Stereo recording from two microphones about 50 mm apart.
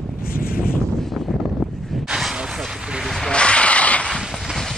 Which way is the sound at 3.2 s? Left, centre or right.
Left.